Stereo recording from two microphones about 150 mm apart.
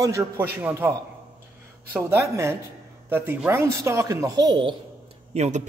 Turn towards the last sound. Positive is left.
turn(degrees=-50)  # may be behind; listen again after turning